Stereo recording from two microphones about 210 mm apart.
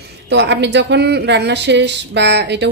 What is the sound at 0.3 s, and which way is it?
Speech, 55° right (ahead or behind).